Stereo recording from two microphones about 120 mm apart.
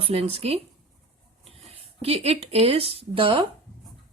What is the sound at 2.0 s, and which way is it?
Speech, 55° right (ahead or behind).